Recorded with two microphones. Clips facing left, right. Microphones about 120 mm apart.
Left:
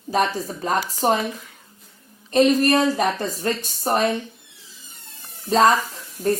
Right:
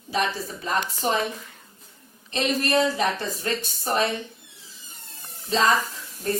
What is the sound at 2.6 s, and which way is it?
Speech, 45° left (ahead or behind).